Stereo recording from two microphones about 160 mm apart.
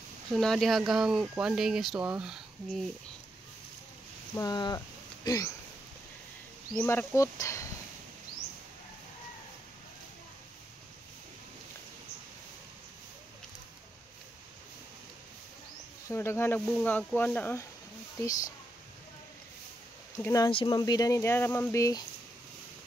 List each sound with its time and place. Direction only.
0.3 s speech: 5° left (ahead or behind)
4.4 s speech: 25° left (ahead or behind)
6.8 s speech: 15° left (ahead or behind)
16.1 s speech: 15° left (ahead or behind)
20.2 s speech: 15° left (ahead or behind)
20.4 s speech: 30° left (ahead or behind)